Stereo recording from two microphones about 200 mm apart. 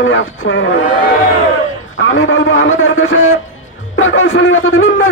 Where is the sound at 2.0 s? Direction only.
75° left (ahead or behind).